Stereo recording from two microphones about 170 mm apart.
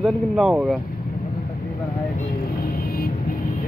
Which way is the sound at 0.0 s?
Centre (ahead or behind).